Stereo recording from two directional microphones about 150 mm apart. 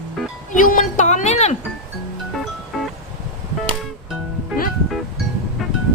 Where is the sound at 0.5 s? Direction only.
60° left (ahead or behind).